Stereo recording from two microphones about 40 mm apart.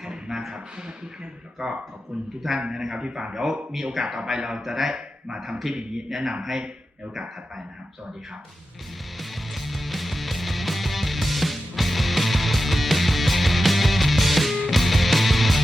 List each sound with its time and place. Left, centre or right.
0.0 s a sound: centre
1.5 s a man's voice: centre
2.6 s a man's voice: centre
9.1 s music: centre